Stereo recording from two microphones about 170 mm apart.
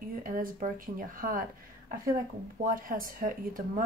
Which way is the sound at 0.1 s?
55° right (ahead or behind).